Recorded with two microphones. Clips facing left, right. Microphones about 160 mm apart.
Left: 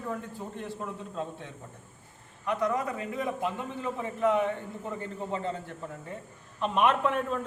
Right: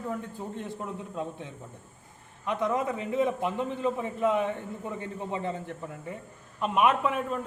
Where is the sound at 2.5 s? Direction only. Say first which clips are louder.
Right 1 dB; 20° right (ahead or behind).